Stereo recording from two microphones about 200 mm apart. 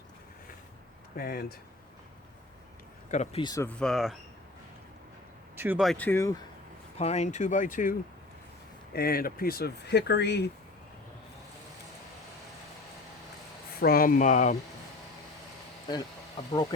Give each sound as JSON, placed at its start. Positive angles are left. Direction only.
{"t": 1.1, "sound": "speech", "side_deg": 50}
{"t": 3.1, "sound": "speech", "side_deg": 35}
{"t": 3.4, "sound": "speech", "side_deg": 20}
{"t": 3.7, "sound": "speech", "side_deg": 5}
{"t": 5.5, "sound": "speech", "side_deg": -5}
{"t": 7.0, "sound": "speech", "side_deg": 35}
{"t": 13.7, "sound": "speech", "side_deg": 50}
{"t": 16.4, "sound": "speech", "side_deg": 30}